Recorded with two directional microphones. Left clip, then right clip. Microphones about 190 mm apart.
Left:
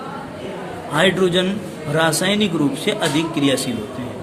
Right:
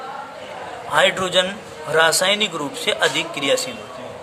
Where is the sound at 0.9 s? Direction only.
25° right (ahead or behind).